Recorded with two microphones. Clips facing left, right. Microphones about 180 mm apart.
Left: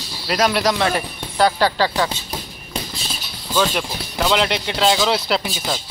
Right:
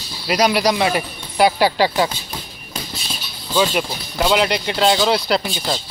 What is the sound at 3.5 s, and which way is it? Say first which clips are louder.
Speech: right 2 dB; 5° right (ahead or behind).